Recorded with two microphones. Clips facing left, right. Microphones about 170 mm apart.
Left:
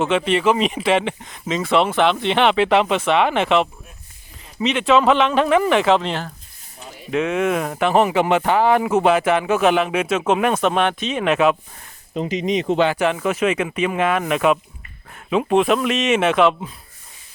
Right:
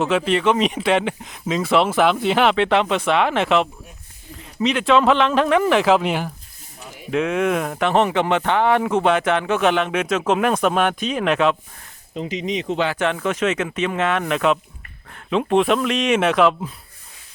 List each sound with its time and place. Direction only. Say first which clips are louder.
0.0 s speech: left 1 dB; centre (ahead or behind)
7.1 s speech: even; centre (ahead or behind)
12.1 s speech: left 4 dB; 50° left (ahead or behind)
12.9 s speech: left 2 dB; 10° left (ahead or behind)